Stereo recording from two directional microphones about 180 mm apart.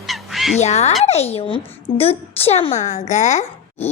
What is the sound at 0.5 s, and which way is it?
A woman's voice, 40° left (ahead or behind).